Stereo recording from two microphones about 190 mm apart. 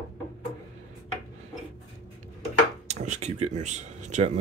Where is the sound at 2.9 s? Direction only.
35° right (ahead or behind).